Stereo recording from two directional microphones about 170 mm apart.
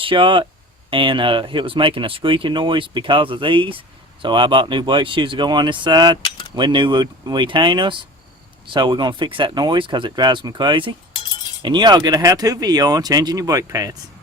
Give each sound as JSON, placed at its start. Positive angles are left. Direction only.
{"t": 0.0, "sound": "speech", "side_deg": -30}